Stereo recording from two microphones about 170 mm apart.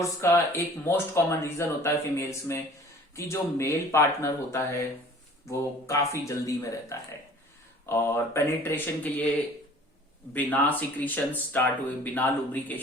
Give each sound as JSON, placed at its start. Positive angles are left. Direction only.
{"t": 0.0, "sound": "speech", "side_deg": 15}
{"t": 10.3, "sound": "speech", "side_deg": 10}